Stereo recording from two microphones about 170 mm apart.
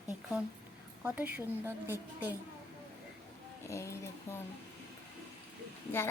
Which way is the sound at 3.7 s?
15° left (ahead or behind).